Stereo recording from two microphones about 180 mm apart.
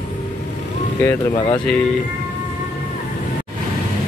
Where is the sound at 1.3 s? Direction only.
25° left (ahead or behind).